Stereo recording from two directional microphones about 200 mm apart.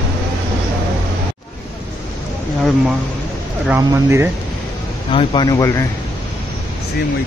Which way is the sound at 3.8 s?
15° right (ahead or behind).